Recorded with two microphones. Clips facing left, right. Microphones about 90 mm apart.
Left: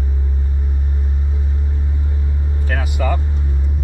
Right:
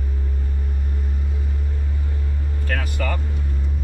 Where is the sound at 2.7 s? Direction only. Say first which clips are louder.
Left 4 dB; 15° left (ahead or behind).